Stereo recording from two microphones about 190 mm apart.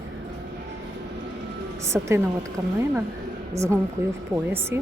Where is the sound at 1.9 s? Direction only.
15° right (ahead or behind).